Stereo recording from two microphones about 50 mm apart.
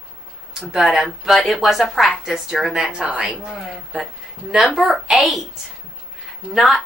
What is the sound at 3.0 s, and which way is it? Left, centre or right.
Speech, right.